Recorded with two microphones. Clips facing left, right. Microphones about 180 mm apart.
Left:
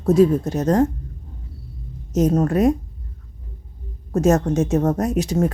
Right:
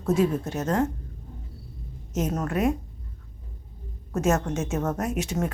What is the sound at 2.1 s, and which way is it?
Speech, 35° left (ahead or behind).